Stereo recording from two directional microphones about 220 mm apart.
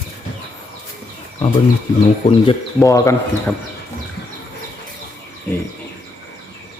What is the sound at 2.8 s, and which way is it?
Speech, 15° left (ahead or behind).